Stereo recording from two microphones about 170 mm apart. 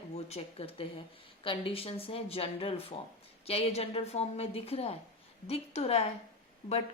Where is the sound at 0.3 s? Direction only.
35° left (ahead or behind).